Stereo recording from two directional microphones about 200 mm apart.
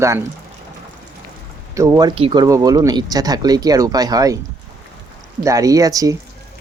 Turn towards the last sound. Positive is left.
turn(degrees=-15)  # may be behind; listen again after turning